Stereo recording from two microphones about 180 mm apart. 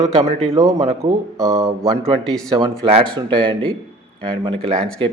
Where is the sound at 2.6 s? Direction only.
30° right (ahead or behind).